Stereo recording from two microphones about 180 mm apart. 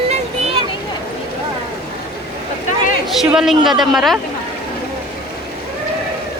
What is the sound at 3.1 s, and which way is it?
A woman's voice, centre (ahead or behind).